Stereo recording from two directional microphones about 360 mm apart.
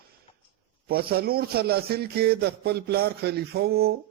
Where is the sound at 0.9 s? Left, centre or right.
Right.